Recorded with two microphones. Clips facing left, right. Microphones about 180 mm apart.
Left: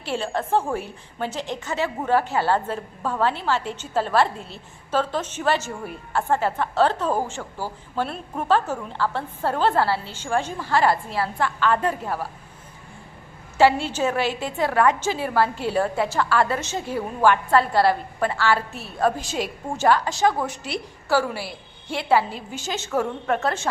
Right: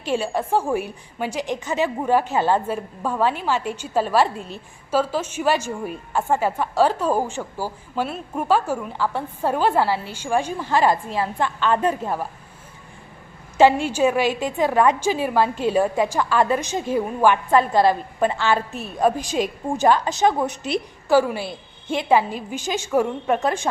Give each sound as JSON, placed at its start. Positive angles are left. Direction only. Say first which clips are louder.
{"t": 0.0, "sound": "a woman's voice", "louder": "right 3 dB", "side_deg": -15}
{"t": 13.6, "sound": "a woman's voice", "louder": "right 3 dB", "side_deg": -15}